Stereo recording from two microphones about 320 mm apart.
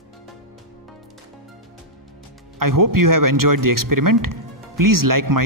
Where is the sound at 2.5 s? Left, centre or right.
Right.